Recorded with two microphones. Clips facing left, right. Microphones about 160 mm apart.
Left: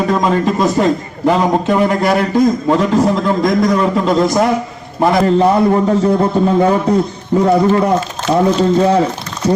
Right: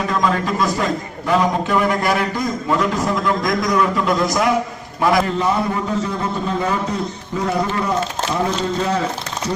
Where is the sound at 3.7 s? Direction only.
25° left (ahead or behind).